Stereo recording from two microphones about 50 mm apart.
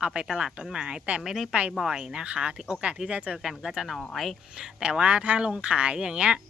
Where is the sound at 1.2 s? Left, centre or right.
Centre; by 3.3 s right.